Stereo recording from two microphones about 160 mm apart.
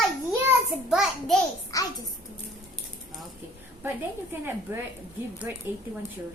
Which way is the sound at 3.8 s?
15° right (ahead or behind).